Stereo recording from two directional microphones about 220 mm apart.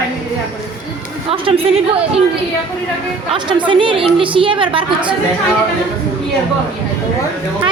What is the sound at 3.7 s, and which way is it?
A woman's voice, 25° right (ahead or behind).